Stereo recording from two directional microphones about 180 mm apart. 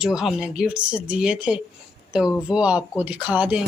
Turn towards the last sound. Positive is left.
turn(degrees=-5)  # may be behind; listen again after turning